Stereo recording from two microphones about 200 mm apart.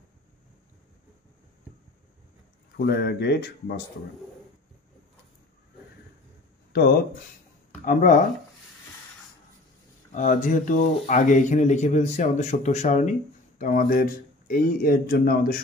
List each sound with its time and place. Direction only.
2.8 s speech: 55° left (ahead or behind)
6.7 s speech: 50° left (ahead or behind)
10.1 s speech: 40° left (ahead or behind)